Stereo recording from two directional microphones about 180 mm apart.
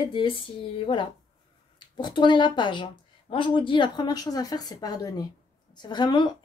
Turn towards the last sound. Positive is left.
turn(degrees=25)  # may be behind; listen again after turning